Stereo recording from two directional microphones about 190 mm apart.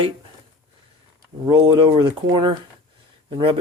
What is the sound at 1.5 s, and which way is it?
Speech, 25° right (ahead or behind).